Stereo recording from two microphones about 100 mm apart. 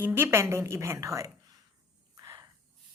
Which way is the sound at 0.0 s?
25° right (ahead or behind).